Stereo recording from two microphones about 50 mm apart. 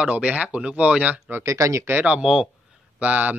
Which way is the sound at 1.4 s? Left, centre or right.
Right.